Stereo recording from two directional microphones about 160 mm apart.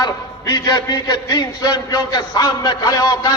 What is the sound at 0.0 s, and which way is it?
A man's voice, 25° left (ahead or behind).